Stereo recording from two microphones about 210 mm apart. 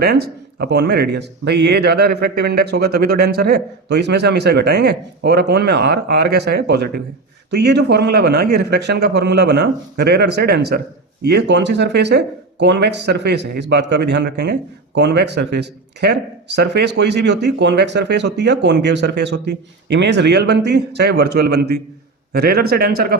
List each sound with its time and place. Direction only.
0.0 s a man's voice: 50° right (ahead or behind)